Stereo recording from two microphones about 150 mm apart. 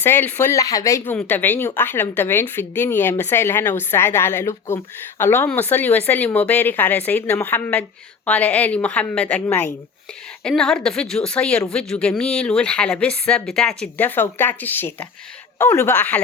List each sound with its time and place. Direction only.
0.0 s a woman's voice: 15° left (ahead or behind)